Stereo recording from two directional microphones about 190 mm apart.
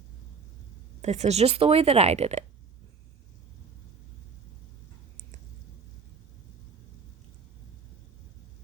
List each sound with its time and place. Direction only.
1.0 s speech: 35° right (ahead or behind)